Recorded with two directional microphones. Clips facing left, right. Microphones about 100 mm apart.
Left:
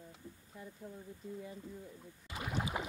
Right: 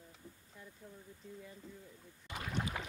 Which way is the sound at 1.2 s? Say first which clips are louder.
Left 6 dB; 5° left (ahead or behind).